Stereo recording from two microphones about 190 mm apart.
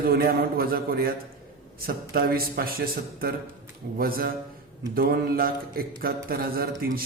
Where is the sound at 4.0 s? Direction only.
50° right (ahead or behind).